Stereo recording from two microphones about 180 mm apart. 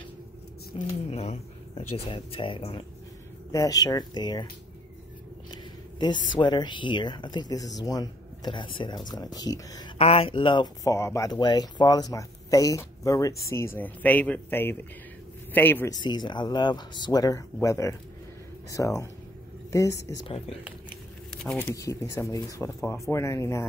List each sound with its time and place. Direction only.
0.7 s speech: 40° left (ahead or behind)
5.5 s a sound: 25° left (ahead or behind)
6.3 s speech: 25° left (ahead or behind)
9.9 s speech: 35° left (ahead or behind); by 16.0 s 10° left (ahead or behind)
16.0 s a woman's voice: 25° left (ahead or behind)
21.4 s speech: 5° left (ahead or behind)
21.7 s speech: 20° left (ahead or behind)